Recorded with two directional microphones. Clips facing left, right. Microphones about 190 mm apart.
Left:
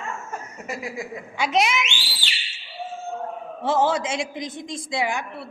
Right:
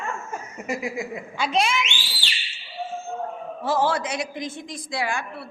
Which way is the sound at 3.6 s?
20° left (ahead or behind).